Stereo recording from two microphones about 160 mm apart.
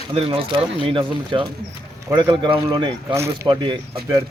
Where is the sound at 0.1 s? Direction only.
35° right (ahead or behind).